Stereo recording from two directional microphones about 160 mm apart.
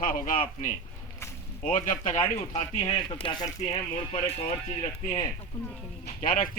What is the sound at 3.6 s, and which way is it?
Speech, 40° left (ahead or behind).